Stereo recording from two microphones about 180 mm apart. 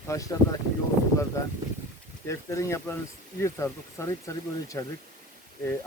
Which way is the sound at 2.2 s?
15° left (ahead or behind).